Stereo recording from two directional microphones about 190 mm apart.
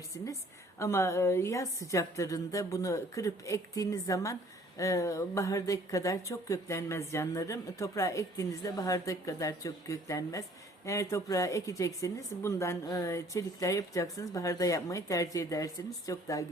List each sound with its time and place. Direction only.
0.1 s speech: 15° left (ahead or behind)